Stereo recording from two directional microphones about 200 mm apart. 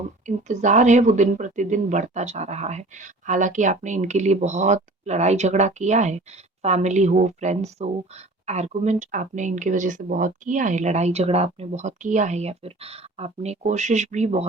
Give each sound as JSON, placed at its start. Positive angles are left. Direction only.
{"t": 0.3, "sound": "speech", "side_deg": -35}